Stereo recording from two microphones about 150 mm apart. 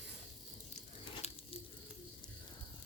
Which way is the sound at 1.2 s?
45° left (ahead or behind).